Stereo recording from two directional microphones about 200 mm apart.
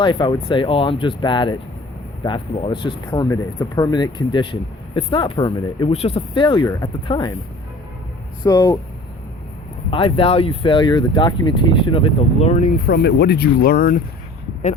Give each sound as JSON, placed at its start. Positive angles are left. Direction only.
{"t": 0.0, "sound": "speech", "side_deg": 25}
{"t": 8.4, "sound": "speech", "side_deg": 20}
{"t": 9.9, "sound": "speech", "side_deg": 25}